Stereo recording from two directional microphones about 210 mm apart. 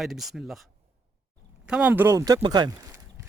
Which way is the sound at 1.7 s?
5° right (ahead or behind).